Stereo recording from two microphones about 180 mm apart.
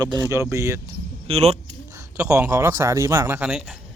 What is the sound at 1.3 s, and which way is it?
Speech, 35° right (ahead or behind).